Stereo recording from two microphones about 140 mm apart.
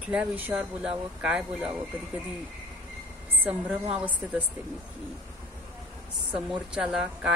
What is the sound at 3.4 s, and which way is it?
A woman's voice, 10° right (ahead or behind).